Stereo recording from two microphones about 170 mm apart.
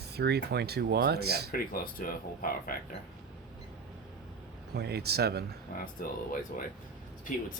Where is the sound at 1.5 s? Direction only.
55° left (ahead or behind).